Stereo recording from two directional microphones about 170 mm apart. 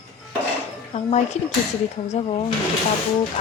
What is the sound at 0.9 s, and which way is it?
A woman's voice, 40° left (ahead or behind).